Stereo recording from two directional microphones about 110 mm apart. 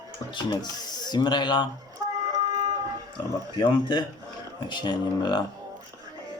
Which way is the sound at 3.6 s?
45° left (ahead or behind).